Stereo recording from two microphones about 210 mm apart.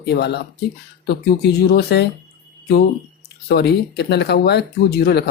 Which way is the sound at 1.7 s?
50° left (ahead or behind).